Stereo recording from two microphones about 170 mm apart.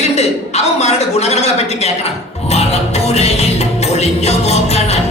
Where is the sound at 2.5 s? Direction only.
40° left (ahead or behind).